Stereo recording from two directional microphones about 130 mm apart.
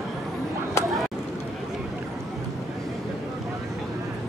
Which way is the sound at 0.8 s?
20° left (ahead or behind).